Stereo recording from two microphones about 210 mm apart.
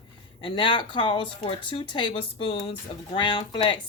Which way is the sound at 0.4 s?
25° left (ahead or behind).